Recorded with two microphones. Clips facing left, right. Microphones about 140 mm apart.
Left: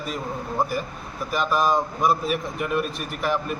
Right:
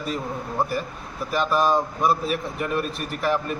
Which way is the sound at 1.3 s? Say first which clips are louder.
Right 1 dB; centre (ahead or behind).